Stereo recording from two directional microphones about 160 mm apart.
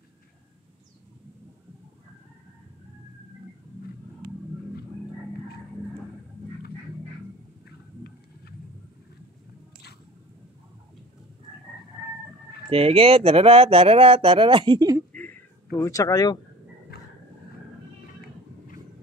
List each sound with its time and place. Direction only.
12.6 s speech: 35° right (ahead or behind)
15.1 s a sound: 10° left (ahead or behind)
16.9 s dog: 75° left (ahead or behind)